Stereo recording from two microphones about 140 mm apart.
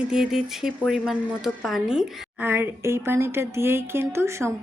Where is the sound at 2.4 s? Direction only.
15° right (ahead or behind).